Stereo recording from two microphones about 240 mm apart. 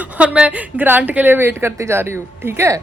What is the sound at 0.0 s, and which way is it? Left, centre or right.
A woman's voice, centre.